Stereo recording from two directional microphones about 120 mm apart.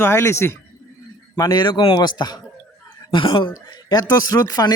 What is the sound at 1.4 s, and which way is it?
Speech, 40° left (ahead or behind).